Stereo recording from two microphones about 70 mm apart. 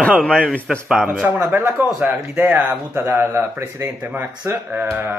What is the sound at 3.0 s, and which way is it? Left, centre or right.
Speech, right.